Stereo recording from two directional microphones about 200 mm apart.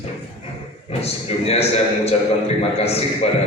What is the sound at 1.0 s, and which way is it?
A man's voice, 30° left (ahead or behind).